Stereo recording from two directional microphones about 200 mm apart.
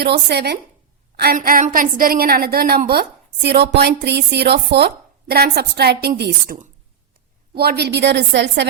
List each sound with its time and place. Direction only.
0.0 s a woman's voice: 55° right (ahead or behind)